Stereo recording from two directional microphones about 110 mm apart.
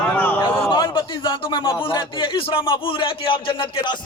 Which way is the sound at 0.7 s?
45° left (ahead or behind).